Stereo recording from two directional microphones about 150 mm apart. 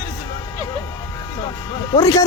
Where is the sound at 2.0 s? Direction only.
20° left (ahead or behind).